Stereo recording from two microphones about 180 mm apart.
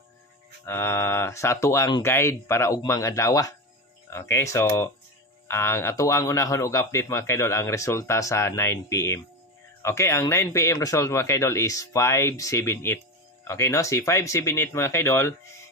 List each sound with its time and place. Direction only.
0.7 s speech: 15° left (ahead or behind)